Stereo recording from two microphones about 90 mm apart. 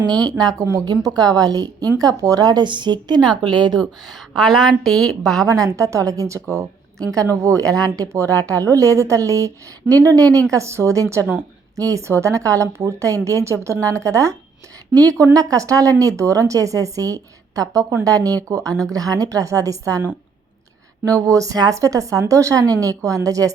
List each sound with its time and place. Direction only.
0.2 s a woman's voice: 50° right (ahead or behind)
3.8 s a woman's voice: centre (ahead or behind)
5.5 s speech: 40° right (ahead or behind)
21.0 s speech: 40° right (ahead or behind)